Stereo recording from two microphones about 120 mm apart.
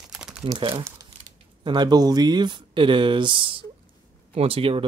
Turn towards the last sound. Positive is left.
turn(degrees=-50)  # may be behind; listen again after turning